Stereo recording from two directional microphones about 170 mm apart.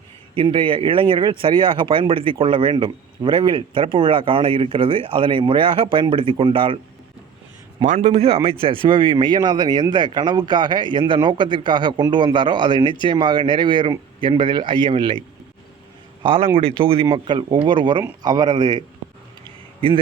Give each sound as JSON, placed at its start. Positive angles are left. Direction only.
{"t": 0.3, "sound": "speech", "side_deg": -30}
{"t": 7.9, "sound": "speech", "side_deg": -45}
{"t": 16.2, "sound": "speech", "side_deg": -30}
{"t": 19.5, "sound": "a sound", "side_deg": -30}